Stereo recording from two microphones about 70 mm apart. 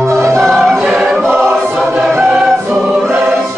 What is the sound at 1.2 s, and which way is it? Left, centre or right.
Choir, right.